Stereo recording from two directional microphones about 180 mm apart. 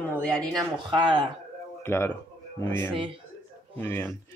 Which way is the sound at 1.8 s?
15° left (ahead or behind).